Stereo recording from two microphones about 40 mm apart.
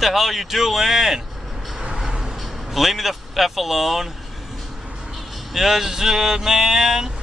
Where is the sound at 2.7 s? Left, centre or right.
Centre.